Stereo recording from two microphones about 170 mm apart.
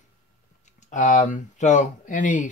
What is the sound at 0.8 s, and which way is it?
Speech, 45° left (ahead or behind).